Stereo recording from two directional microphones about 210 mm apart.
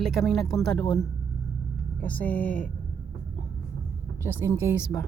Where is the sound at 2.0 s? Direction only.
5° left (ahead or behind).